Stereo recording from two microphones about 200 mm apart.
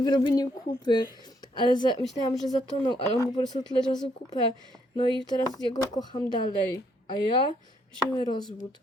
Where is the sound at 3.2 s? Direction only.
20° left (ahead or behind).